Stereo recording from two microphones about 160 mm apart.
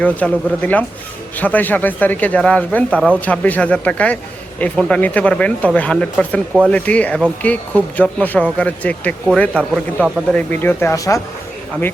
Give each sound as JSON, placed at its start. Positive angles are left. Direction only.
{"t": 0.0, "sound": "speech", "side_deg": 10}